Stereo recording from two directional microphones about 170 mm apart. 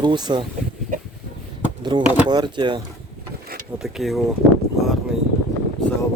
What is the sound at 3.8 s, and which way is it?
Speech, centre (ahead or behind).